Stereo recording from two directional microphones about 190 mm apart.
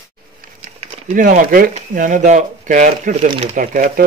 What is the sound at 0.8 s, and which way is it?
Speech, 45° right (ahead or behind).